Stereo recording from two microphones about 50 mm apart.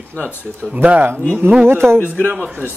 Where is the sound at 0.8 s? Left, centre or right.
Right.